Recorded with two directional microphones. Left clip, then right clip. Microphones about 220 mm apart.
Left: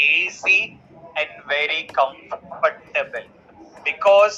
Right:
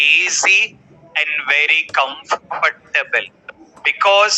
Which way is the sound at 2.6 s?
40° right (ahead or behind).